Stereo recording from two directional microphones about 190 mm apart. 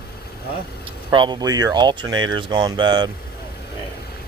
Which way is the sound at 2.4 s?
25° right (ahead or behind).